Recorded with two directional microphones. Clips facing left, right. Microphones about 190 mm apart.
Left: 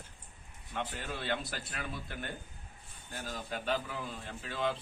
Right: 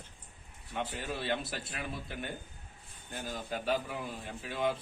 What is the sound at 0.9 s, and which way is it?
A man's voice, 5° right (ahead or behind).